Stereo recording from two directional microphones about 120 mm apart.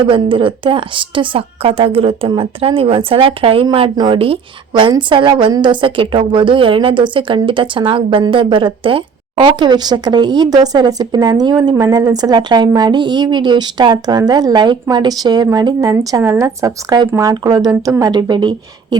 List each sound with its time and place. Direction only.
0.0 s a woman's voice: 45° right (ahead or behind)
15.8 s a woman's voice: 25° right (ahead or behind)